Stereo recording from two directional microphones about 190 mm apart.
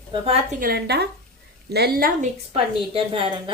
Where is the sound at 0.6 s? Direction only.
55° right (ahead or behind).